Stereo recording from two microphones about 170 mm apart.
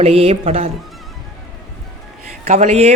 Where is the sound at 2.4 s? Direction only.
40° right (ahead or behind).